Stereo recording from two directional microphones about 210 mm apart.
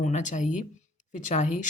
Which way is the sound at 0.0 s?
35° left (ahead or behind).